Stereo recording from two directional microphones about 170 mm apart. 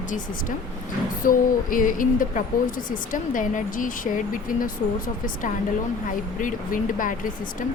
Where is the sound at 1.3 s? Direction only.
55° left (ahead or behind).